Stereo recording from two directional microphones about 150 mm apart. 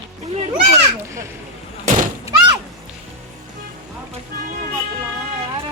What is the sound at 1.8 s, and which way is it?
Thunk, 60° right (ahead or behind).